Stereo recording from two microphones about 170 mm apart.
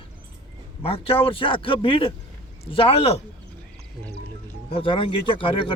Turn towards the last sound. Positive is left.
turn(degrees=30)  # may be behind; listen again after turning